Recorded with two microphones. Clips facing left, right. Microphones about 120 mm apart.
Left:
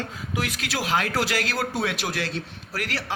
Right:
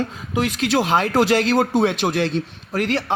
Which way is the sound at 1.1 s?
40° right (ahead or behind).